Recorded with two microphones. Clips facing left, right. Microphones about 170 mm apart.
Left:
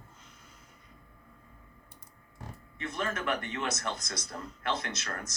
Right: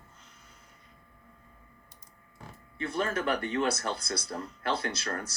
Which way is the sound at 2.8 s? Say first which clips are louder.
Right 4 dB; 30° right (ahead or behind).